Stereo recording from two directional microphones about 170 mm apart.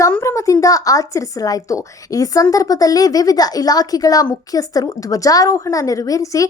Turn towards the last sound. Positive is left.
turn(degrees=20)  # may be behind; listen again after turning